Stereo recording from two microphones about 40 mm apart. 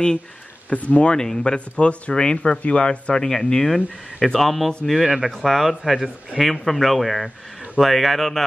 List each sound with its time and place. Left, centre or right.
0.7 s speech: left
1.1 s speech: centre
1.8 s speech: left
3.3 s speech: centre